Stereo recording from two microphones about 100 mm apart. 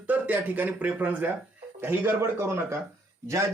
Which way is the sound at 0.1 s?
15° right (ahead or behind).